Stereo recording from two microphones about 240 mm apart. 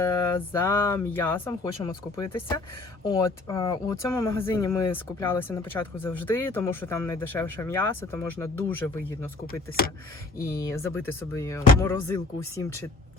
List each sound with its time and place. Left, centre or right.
0.0 s speech: centre
9.5 s speech: left
11.3 s speech: centre